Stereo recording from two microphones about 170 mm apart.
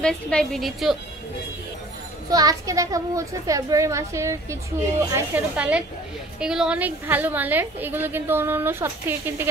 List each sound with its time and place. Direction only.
0.0 s a woman's voice: 5° left (ahead or behind)
2.3 s a woman's voice: 20° right (ahead or behind)